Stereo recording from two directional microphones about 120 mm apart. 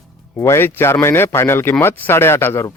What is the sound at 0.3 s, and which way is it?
A man's voice, 20° left (ahead or behind).